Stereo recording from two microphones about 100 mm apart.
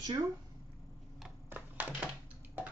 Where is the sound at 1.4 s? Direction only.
15° right (ahead or behind).